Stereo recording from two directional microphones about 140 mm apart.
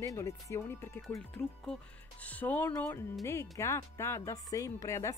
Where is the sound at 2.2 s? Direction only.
10° left (ahead or behind).